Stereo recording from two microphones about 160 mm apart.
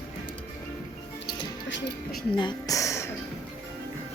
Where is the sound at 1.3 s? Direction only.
85° left.